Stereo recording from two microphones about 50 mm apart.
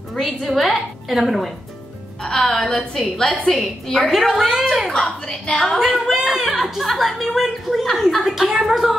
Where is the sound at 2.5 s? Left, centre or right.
Centre.